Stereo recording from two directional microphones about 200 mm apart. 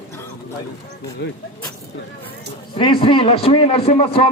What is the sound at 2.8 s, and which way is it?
A man's voice, 25° left (ahead or behind).